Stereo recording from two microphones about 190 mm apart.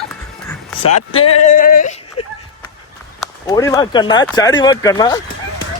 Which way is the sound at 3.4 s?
20° left (ahead or behind).